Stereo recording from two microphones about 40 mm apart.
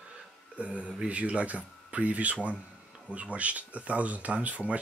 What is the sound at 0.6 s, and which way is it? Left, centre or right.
Speech, right.